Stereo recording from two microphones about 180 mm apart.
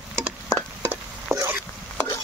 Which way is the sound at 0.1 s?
5° left (ahead or behind).